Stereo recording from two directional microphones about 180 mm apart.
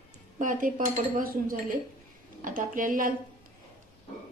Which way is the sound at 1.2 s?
50° right (ahead or behind).